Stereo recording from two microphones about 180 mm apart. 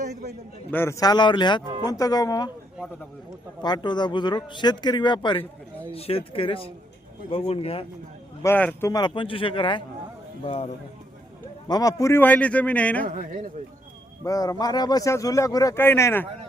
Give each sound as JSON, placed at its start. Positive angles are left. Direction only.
{"t": 0.7, "sound": "speech", "side_deg": 15}
{"t": 3.6, "sound": "speech", "side_deg": 25}
{"t": 8.4, "sound": "a man's voice", "side_deg": 10}
{"t": 8.9, "sound": "speech", "side_deg": 25}
{"t": 11.7, "sound": "a man's voice", "side_deg": 20}
{"t": 13.1, "sound": "speech", "side_deg": -50}
{"t": 14.3, "sound": "speech", "side_deg": 20}